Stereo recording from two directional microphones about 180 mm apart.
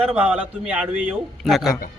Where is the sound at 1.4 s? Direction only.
Centre (ahead or behind).